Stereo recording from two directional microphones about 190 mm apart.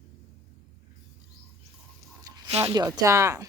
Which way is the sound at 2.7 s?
20° right (ahead or behind).